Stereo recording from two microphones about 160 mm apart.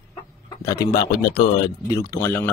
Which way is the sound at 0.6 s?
20° left (ahead or behind).